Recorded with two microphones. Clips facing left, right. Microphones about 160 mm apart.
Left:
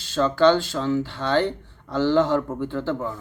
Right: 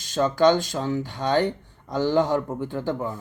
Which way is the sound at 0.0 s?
15° right (ahead or behind).